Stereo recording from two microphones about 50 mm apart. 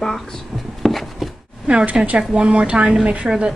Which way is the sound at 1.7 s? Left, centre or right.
Right.